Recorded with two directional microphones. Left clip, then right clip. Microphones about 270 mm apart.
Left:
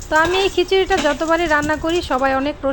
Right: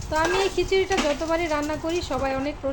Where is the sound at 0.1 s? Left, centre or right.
Centre.